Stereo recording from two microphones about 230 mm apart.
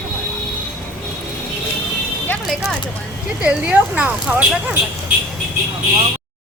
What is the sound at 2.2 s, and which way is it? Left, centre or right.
Speech, centre.